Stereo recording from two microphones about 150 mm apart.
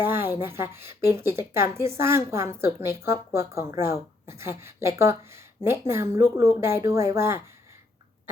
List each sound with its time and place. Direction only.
0.0 s a woman's voice: 15° right (ahead or behind)